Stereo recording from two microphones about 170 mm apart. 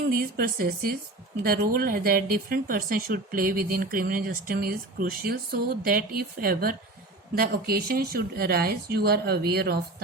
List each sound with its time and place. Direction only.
0.1 s speech: 60° right (ahead or behind)